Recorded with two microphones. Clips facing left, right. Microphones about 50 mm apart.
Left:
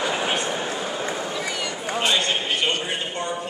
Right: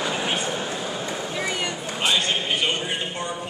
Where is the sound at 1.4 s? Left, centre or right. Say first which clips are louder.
Right 1 dB; right.